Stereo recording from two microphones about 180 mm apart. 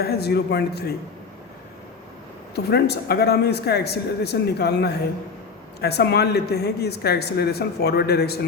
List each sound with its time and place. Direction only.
0.0 s speech: 60° left (ahead or behind)
2.6 s speech: 65° left (ahead or behind)